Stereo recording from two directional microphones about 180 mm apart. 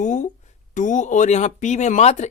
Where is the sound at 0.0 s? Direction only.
45° left (ahead or behind).